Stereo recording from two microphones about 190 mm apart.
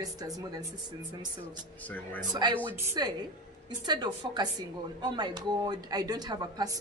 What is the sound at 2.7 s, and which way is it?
A woman's voice, 15° right (ahead or behind).